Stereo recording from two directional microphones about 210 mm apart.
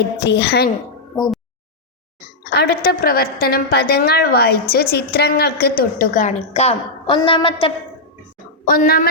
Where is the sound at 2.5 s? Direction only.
50° left (ahead or behind); by 7.7 s 25° left (ahead or behind).